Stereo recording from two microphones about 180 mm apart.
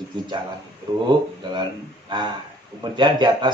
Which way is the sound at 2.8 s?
25° right (ahead or behind).